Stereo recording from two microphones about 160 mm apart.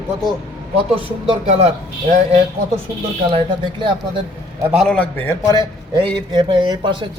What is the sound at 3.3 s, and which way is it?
Speech, 30° right (ahead or behind).